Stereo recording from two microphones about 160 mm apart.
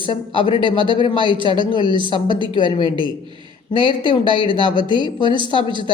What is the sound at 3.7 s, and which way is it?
A woman's voice, 30° right (ahead or behind).